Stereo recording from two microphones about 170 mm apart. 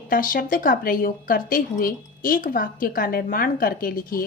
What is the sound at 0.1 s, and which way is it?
A woman's voice, 55° left (ahead or behind).